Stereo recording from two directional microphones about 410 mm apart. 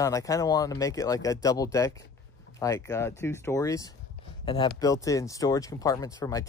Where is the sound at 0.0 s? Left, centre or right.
Centre.